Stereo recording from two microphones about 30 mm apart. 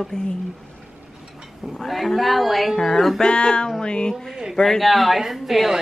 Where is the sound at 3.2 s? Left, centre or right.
Left.